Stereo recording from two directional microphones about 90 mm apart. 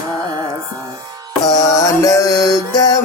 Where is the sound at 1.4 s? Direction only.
40° left (ahead or behind).